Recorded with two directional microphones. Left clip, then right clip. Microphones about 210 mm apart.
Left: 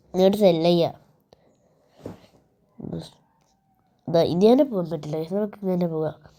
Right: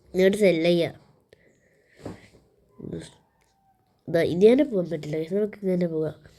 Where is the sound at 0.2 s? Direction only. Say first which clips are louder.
Left 2 dB; 15° left (ahead or behind).